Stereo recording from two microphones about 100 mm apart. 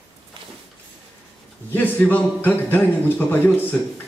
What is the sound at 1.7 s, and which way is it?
A man's voice, 15° left (ahead or behind).